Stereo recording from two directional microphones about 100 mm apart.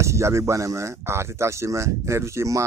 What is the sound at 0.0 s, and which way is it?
Speech, 30° right (ahead or behind).